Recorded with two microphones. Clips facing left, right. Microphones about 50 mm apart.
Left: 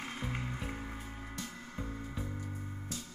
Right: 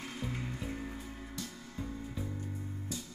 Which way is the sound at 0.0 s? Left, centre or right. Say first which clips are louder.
Even; left.